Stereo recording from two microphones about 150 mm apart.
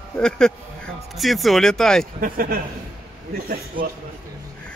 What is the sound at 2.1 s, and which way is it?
Speech, 70° right (ahead or behind).